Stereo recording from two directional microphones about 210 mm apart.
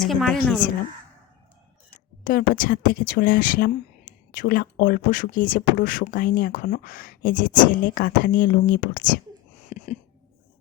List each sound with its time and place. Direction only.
0.0 s speech: centre (ahead or behind)
2.2 s speech: 40° left (ahead or behind)
9.6 s a sound: 35° left (ahead or behind)